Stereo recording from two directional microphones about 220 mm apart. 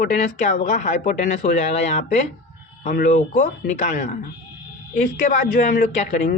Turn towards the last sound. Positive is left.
turn(degrees=35)  # may be behind; listen again after turning